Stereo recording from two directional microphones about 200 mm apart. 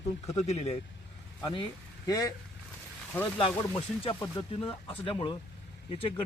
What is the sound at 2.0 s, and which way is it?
Speech, 20° left (ahead or behind).